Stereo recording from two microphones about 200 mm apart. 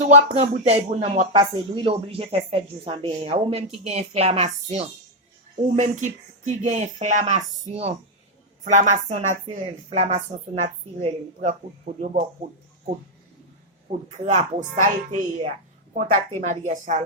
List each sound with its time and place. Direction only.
0.1 s speech: 35° right (ahead or behind)
11.9 s speech: 50° right (ahead or behind)
13.9 s speech: 35° right (ahead or behind)